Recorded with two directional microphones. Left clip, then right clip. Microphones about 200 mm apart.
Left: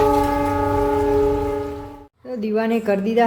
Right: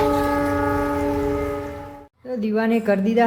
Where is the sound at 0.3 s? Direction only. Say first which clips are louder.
Left 1 dB; 30° left (ahead or behind).